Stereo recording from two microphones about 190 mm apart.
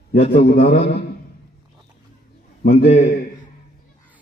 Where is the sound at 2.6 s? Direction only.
35° left (ahead or behind).